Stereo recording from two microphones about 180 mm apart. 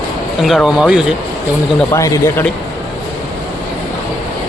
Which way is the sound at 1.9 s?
15° left (ahead or behind).